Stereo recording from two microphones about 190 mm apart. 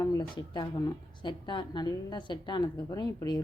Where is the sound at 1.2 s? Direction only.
25° left (ahead or behind).